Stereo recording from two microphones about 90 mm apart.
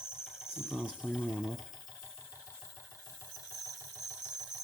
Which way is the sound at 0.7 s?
5° right (ahead or behind).